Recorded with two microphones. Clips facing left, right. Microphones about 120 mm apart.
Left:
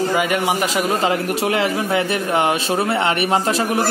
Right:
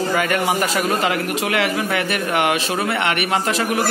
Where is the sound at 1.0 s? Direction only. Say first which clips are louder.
Left 2 dB; 35° left (ahead or behind).